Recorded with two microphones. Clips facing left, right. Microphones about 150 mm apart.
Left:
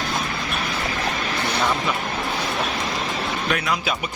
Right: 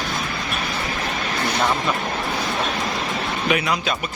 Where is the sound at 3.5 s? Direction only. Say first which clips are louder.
Right 4 dB; 5° right (ahead or behind).